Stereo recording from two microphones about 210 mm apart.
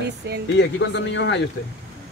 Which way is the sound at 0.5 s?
60° left (ahead or behind).